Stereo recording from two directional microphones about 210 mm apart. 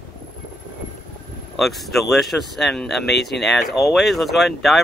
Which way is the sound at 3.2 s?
50° left (ahead or behind).